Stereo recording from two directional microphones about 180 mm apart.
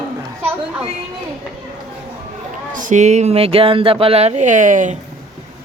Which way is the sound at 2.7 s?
45° right (ahead or behind).